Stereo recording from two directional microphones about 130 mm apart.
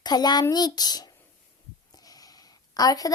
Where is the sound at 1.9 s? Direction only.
30° left (ahead or behind).